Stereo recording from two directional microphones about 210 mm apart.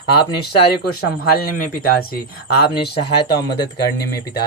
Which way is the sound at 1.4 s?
45° left (ahead or behind).